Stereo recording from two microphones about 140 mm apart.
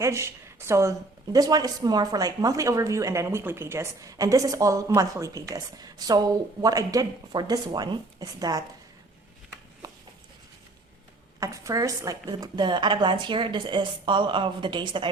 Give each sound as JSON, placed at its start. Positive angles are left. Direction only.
{"t": 0.0, "sound": "a woman's voice", "side_deg": -20}
{"t": 11.3, "sound": "a woman's voice", "side_deg": -25}